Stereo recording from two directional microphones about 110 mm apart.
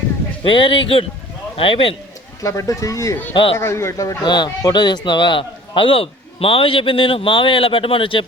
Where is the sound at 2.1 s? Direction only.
30° left (ahead or behind).